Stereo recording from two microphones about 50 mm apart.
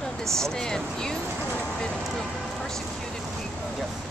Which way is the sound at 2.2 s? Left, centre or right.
Centre.